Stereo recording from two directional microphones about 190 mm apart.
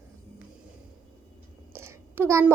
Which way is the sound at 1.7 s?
15° right (ahead or behind).